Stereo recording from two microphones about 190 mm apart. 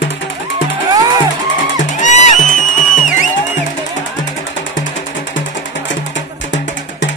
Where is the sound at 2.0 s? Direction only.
40° left (ahead or behind).